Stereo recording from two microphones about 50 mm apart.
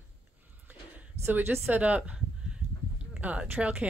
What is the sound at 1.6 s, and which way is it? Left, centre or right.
Speech, right.